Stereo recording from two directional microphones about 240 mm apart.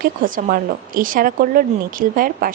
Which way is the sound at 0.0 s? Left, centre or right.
Right.